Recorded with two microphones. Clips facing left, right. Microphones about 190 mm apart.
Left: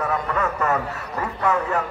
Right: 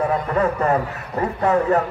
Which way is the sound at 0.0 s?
30° right (ahead or behind).